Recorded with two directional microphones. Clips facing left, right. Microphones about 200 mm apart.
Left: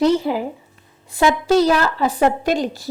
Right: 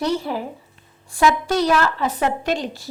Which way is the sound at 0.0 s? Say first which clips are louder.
Left 6 dB; 20° left (ahead or behind).